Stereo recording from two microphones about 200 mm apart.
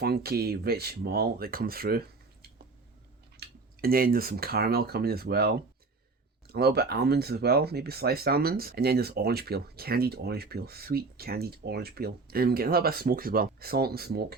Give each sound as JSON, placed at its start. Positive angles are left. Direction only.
{"t": 0.0, "sound": "speech", "side_deg": -50}
{"t": 3.3, "sound": "speech", "side_deg": -50}